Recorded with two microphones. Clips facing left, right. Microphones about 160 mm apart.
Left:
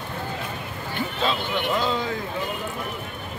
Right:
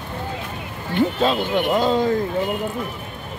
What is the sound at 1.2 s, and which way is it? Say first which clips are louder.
Speech: right 6 dB; 45° right (ahead or behind).